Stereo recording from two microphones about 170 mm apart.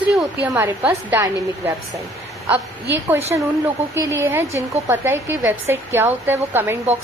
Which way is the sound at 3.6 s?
15° right (ahead or behind).